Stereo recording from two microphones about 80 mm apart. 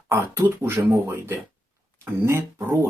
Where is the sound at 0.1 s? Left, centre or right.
Right.